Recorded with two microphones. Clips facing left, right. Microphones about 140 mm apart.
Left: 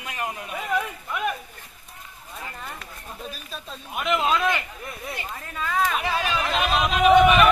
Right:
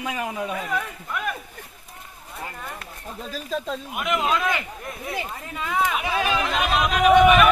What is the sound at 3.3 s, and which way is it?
Speech, 90° right.